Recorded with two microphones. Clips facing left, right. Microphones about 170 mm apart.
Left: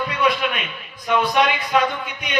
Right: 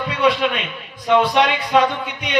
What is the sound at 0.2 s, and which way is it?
A man's voice, 25° right (ahead or behind).